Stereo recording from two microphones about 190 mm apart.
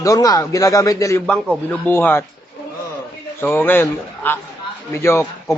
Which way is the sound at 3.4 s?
10° left (ahead or behind).